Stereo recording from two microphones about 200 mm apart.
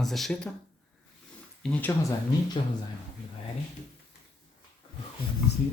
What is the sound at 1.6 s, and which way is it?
Speech, 5° left (ahead or behind).